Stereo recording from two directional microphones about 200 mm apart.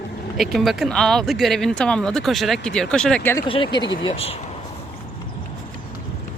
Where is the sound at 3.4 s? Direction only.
25° left (ahead or behind).